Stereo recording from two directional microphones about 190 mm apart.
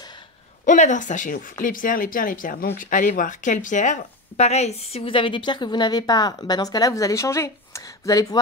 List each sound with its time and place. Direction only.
0.7 s speech: 40° left (ahead or behind); by 8.4 s 20° left (ahead or behind)